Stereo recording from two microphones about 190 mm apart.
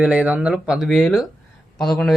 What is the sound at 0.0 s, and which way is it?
Speech, 5° right (ahead or behind).